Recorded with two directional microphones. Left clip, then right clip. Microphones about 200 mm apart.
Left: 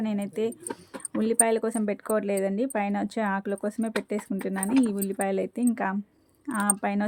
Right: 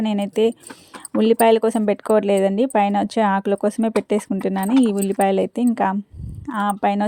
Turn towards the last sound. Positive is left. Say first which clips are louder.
# right 8 dB
turn(degrees=-30)  # may be behind; listen again after turning